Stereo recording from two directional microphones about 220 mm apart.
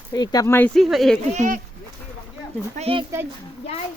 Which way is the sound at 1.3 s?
35° right (ahead or behind).